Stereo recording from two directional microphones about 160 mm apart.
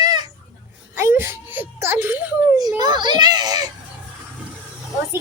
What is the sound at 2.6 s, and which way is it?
A child's voice, 25° right (ahead or behind).